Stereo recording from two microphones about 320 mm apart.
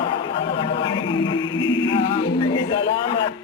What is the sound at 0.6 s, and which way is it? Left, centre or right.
Music, centre.